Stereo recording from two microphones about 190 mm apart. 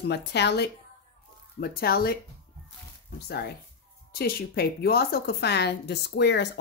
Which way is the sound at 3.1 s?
60° left (ahead or behind).